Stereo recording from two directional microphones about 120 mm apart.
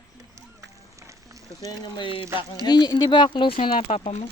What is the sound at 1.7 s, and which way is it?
Speech, 40° left (ahead or behind).